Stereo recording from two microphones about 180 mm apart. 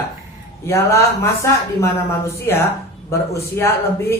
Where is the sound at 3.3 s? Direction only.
15° left (ahead or behind).